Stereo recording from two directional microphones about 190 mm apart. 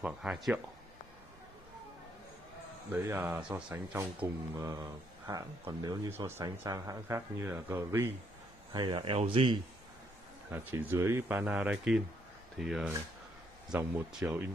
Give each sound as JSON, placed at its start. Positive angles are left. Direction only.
{"t": 0.0, "sound": "speech", "side_deg": -5}
{"t": 2.9, "sound": "speech", "side_deg": -10}
{"t": 8.7, "sound": "speech", "side_deg": -25}
{"t": 10.5, "sound": "speech", "side_deg": -10}